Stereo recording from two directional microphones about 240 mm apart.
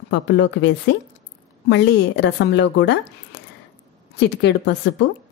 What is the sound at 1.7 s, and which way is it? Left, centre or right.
A woman's voice, left.